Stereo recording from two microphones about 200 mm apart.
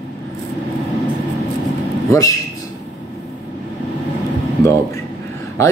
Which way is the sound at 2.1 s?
15° left (ahead or behind).